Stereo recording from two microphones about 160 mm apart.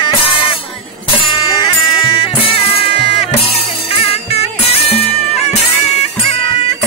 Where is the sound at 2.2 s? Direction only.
35° left (ahead or behind).